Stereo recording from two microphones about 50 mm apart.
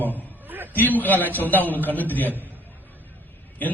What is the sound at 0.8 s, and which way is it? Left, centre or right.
A man's voice, left.